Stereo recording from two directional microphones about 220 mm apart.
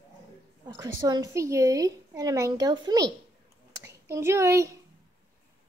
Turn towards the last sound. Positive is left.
turn(degrees=-15)  # may be behind; listen again after turning